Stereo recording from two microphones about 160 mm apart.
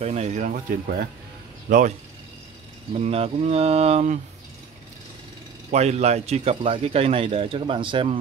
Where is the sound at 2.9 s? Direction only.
40° right (ahead or behind).